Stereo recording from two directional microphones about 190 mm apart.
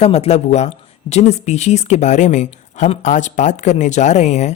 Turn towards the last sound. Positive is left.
turn(degrees=35)  # may be behind; listen again after turning